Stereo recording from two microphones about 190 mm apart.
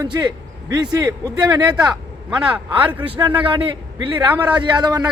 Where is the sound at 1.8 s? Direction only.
5° right (ahead or behind).